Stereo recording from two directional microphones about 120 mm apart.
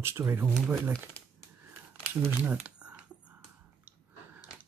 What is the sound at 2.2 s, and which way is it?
Speech, 15° right (ahead or behind).